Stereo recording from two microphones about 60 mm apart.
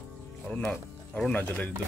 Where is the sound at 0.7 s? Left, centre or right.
Centre.